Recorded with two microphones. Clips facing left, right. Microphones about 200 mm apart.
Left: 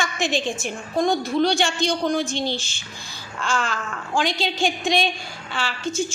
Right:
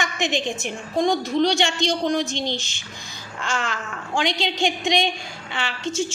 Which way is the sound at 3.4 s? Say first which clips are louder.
Left 2 dB; 20° right (ahead or behind).